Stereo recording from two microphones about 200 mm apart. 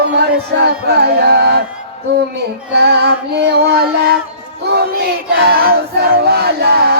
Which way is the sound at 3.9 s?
50° right (ahead or behind).